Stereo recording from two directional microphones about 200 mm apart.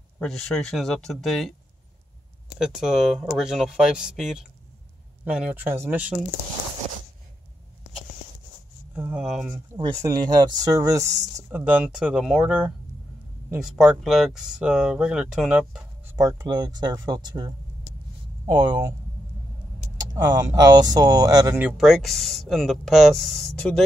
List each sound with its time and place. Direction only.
0.2 s speech: 5° left (ahead or behind)
2.6 s speech: centre (ahead or behind)
8.9 s speech: 5° right (ahead or behind)
9.8 s speech: 25° right (ahead or behind)
20.0 s speech: 20° right (ahead or behind)
21.6 s speech: centre (ahead or behind)